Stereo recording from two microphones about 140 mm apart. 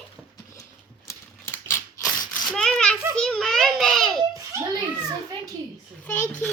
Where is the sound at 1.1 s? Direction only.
15° left (ahead or behind).